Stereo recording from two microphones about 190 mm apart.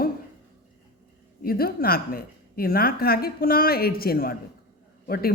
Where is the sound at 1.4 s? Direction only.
50° left (ahead or behind).